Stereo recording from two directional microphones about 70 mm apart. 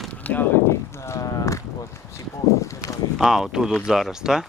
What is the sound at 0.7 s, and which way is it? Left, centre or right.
Run, left.